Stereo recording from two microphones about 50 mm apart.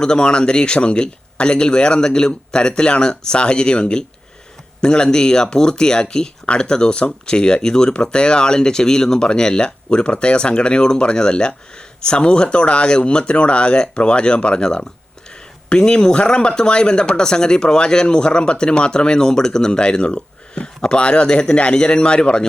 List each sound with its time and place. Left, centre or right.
0.0 s speech: centre